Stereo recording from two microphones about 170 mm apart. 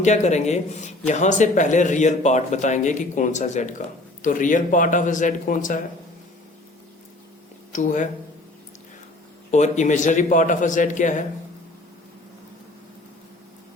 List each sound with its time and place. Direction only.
0.0 s speech: 45° left (ahead or behind)
7.7 s speech: 50° left (ahead or behind)
9.5 s speech: 45° left (ahead or behind)